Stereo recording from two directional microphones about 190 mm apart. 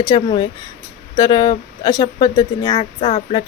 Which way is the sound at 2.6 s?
30° left (ahead or behind).